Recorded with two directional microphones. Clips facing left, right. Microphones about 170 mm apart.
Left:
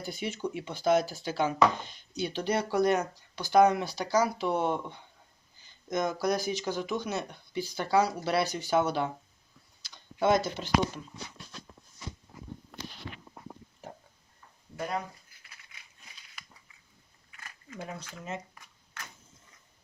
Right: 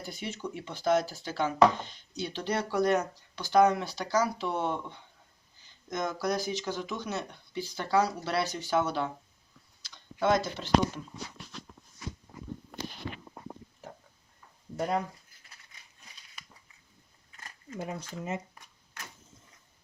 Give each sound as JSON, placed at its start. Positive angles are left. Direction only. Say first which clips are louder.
{"t": 0.1, "sound": "speech", "louder": "left 4 dB", "side_deg": 5}
{"t": 5.9, "sound": "speech", "louder": "left 2 dB", "side_deg": 15}
{"t": 17.3, "sound": "a sound", "louder": "right 4 dB", "side_deg": -35}
{"t": 17.8, "sound": "speech", "louder": "right 4 dB", "side_deg": -20}